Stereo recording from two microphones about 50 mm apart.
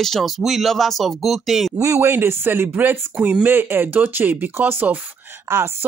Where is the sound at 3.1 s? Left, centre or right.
Centre.